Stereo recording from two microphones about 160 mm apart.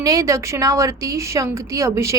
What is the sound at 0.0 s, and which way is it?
Speech, 20° right (ahead or behind).